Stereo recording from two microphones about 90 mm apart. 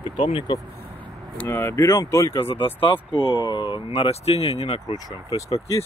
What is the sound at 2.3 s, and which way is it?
Speech, 90° left.